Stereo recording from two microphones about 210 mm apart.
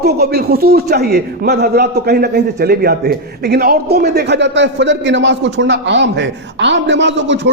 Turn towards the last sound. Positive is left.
turn(degrees=-60)  # may be behind; listen again after turning